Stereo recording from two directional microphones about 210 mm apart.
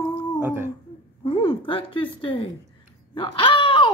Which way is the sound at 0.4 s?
10° right (ahead or behind).